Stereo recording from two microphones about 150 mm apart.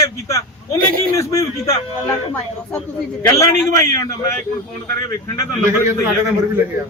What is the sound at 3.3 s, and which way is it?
Speech, 20° left (ahead or behind).